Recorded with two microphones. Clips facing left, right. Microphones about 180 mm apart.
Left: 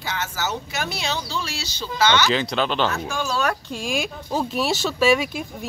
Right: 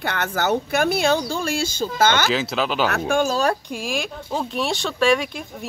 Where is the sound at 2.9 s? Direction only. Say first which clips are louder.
Right 6 dB; 55° right (ahead or behind).